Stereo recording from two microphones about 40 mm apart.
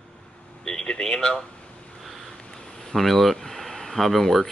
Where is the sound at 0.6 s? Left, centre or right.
Centre.